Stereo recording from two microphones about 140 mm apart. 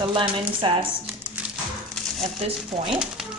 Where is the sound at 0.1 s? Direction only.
35° right (ahead or behind).